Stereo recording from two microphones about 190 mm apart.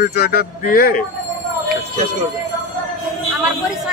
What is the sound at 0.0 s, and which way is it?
Speech, 55° left (ahead or behind).